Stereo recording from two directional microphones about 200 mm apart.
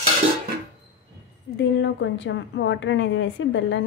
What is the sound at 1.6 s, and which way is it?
A woman's voice, 65° left (ahead or behind).